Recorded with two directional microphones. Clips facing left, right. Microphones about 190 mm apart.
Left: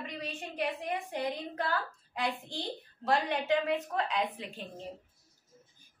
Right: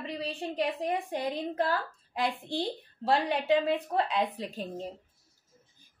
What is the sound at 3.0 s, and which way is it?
A woman's voice, 30° right (ahead or behind).